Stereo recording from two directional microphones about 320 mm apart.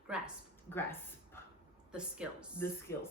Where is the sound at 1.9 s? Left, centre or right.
Centre.